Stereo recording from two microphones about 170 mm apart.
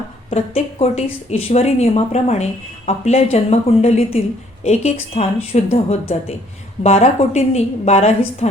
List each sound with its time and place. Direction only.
0.3 s speech: 35° left (ahead or behind)